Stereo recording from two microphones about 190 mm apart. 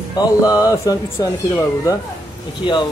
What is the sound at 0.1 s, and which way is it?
Speech, 20° left (ahead or behind).